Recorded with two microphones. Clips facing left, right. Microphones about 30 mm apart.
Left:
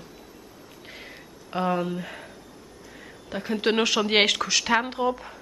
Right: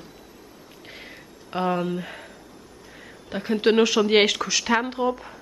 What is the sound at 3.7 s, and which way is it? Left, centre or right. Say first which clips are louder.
Speech: right 3 dB; centre.